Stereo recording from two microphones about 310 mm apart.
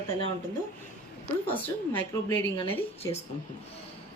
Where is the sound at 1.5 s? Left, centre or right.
Centre.